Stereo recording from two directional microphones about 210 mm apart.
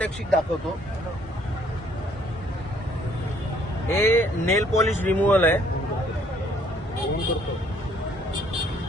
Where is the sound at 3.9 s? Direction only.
10° left (ahead or behind).